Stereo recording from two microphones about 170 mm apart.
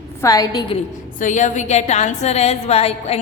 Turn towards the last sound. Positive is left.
turn(degrees=40)  # may be behind; listen again after turning